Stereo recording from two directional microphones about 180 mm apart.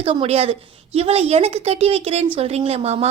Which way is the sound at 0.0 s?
30° right (ahead or behind).